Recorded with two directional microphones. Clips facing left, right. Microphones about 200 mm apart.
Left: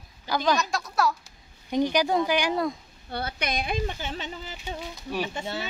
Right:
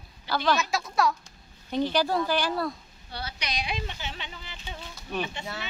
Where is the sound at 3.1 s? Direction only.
55° left (ahead or behind).